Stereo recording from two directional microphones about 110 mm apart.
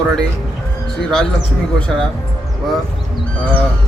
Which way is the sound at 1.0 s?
5° left (ahead or behind).